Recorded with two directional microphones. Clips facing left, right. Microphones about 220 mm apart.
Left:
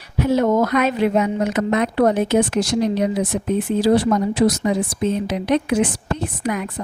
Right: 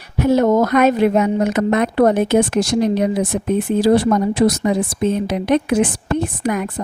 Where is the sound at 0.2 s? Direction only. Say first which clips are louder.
Right 3 dB; 45° right (ahead or behind).